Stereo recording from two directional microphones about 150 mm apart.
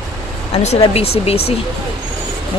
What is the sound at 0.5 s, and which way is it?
Speech, 45° left (ahead or behind).